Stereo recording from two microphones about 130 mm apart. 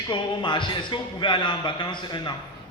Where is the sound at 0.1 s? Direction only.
35° left (ahead or behind).